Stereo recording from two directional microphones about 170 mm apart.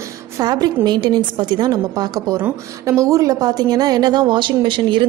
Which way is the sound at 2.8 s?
20° right (ahead or behind).